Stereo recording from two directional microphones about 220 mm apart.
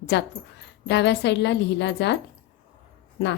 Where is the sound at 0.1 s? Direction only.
50° left (ahead or behind).